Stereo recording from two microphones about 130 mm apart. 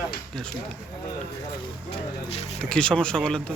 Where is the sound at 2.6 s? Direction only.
5° left (ahead or behind).